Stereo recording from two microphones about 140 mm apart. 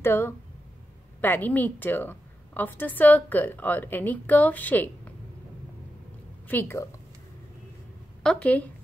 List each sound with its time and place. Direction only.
0.0 s a woman's voice: 15° left (ahead or behind)
6.4 s a woman's voice: 15° left (ahead or behind)
8.2 s speech: 5° left (ahead or behind)